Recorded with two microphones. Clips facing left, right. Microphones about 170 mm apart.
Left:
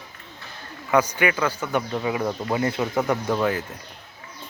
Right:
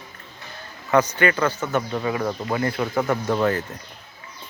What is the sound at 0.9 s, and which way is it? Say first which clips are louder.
A man's voice: right 2 dB; 10° left (ahead or behind).